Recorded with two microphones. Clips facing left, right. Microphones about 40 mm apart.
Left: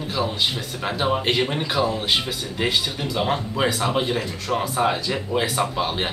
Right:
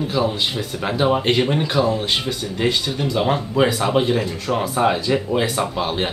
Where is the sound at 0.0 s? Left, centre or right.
Centre.